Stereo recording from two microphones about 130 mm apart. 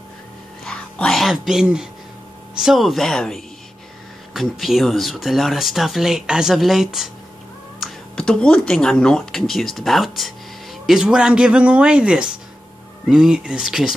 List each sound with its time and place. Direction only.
0.7 s speech: 5° left (ahead or behind)